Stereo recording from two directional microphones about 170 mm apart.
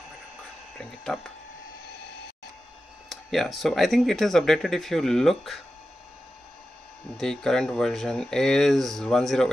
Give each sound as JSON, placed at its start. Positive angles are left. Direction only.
{"t": 0.7, "sound": "speech", "side_deg": 0}
{"t": 3.1, "sound": "speech", "side_deg": 0}
{"t": 7.2, "sound": "speech", "side_deg": 0}